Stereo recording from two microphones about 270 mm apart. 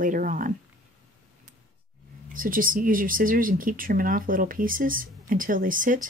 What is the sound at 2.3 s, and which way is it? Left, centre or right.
Speech, right.